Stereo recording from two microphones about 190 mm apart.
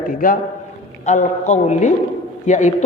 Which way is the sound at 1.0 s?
40° left (ahead or behind).